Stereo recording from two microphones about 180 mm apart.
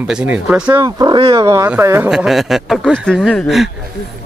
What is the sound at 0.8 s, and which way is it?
Speech, 25° right (ahead or behind).